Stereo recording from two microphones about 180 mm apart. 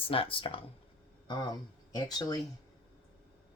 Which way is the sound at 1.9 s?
20° left (ahead or behind).